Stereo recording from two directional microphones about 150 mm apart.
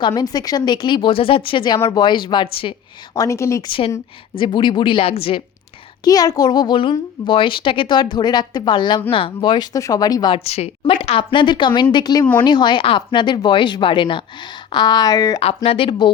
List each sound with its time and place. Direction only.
0.0 s speech: 25° left (ahead or behind)
3.2 s a child's voice: 20° left (ahead or behind)
3.7 s speech: 35° left (ahead or behind)
6.1 s a child's voice: 25° left (ahead or behind)
10.3 s speech: 45° left (ahead or behind)
12.2 s speech: 10° left (ahead or behind)
12.5 s speech: 30° left (ahead or behind)
15.4 s speech: 40° left (ahead or behind)